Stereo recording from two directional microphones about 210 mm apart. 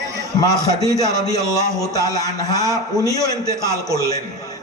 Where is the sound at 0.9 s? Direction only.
20° left (ahead or behind).